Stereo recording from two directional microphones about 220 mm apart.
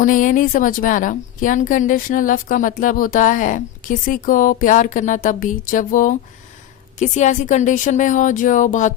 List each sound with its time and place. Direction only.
0.0 s a woman's voice: 35° left (ahead or behind)